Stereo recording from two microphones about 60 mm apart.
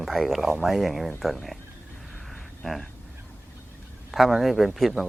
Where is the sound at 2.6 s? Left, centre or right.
Centre.